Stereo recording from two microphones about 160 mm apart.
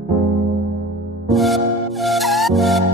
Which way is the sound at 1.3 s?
Centre (ahead or behind).